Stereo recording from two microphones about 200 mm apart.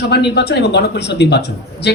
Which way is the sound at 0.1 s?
55° left (ahead or behind).